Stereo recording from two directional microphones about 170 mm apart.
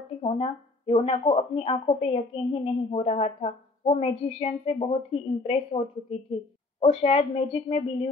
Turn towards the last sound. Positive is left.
turn(degrees=40)  # may be behind; listen again after turning